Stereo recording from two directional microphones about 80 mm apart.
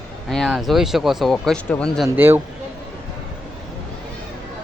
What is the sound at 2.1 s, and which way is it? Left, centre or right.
Speech, right.